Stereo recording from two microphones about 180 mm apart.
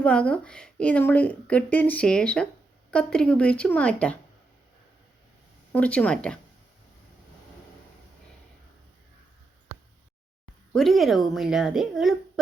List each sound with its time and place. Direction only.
0.0 s a woman's voice: 5° left (ahead or behind)
5.7 s a woman's voice: 10° left (ahead or behind)
10.8 s a woman's voice: centre (ahead or behind)